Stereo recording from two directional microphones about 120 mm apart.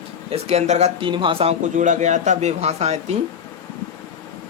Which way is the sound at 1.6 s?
90° right.